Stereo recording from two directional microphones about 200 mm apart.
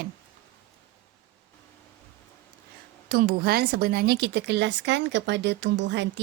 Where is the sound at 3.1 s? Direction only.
45° right (ahead or behind).